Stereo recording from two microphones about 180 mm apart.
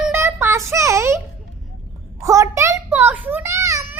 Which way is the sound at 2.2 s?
15° right (ahead or behind).